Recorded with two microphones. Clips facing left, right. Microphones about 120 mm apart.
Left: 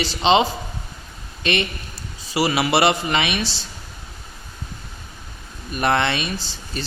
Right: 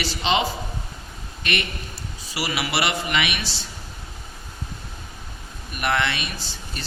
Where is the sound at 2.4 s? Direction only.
30° left (ahead or behind).